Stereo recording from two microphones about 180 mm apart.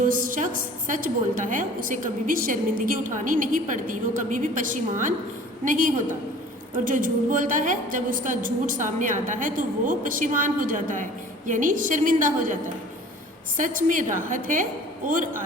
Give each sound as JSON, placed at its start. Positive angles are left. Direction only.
{"t": 0.1, "sound": "a woman's voice", "side_deg": -50}
{"t": 13.6, "sound": "a woman's voice", "side_deg": -45}